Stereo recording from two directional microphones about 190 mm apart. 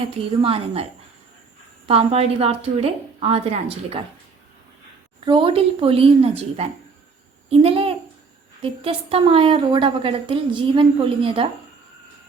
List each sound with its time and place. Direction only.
0.4 s a woman's voice: 30° right (ahead or behind)
1.9 s a woman's voice: 30° right (ahead or behind)
5.2 s a woman's voice: 25° right (ahead or behind)